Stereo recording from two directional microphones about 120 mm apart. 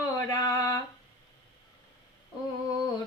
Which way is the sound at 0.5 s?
30° left (ahead or behind).